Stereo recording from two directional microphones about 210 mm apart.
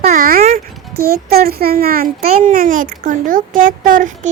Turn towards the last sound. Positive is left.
turn(degrees=-40)  # may be behind; listen again after turning